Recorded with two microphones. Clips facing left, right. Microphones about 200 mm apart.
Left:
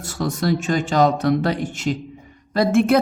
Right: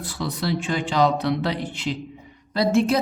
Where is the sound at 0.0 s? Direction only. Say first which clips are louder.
Left 5 dB; 45° left (ahead or behind).